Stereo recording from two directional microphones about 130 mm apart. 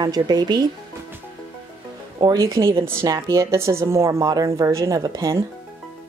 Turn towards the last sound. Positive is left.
turn(degrees=-25)  # may be behind; listen again after turning